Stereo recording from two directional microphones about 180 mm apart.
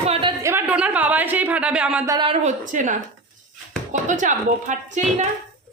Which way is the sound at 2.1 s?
25° right (ahead or behind).